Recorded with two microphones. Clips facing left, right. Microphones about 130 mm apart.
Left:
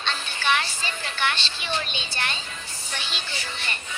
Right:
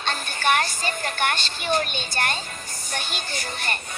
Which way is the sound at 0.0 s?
45° right (ahead or behind).